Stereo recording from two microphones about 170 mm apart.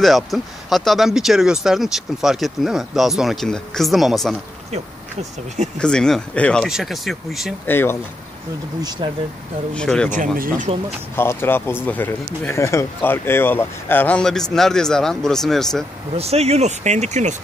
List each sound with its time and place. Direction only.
0.0 s speech: centre (ahead or behind)
5.8 s speech: 5° left (ahead or behind)
7.6 s speech: 15° left (ahead or behind)
9.0 s speech: 25° right (ahead or behind)
9.8 s speech: 5° left (ahead or behind)
10.1 s speech: 55° right (ahead or behind)
11.1 s speech: 15° left (ahead or behind)
16.2 s speech: 35° right (ahead or behind)